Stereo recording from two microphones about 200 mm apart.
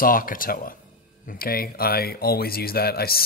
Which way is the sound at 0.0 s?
45° left (ahead or behind).